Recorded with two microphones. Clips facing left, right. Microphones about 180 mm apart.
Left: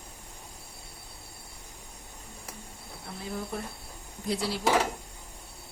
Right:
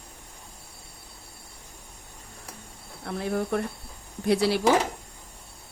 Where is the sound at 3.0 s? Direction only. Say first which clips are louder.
Right 9 dB; 75° right (ahead or behind).